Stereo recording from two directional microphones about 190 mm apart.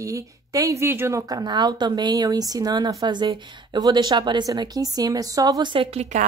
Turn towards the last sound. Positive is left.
turn(degrees=-35)  # may be behind; listen again after turning